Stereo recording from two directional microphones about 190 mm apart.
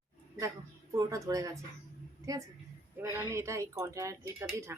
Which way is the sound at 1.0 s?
20° right (ahead or behind).